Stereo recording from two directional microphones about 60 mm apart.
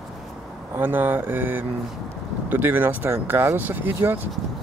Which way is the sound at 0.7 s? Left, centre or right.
Right.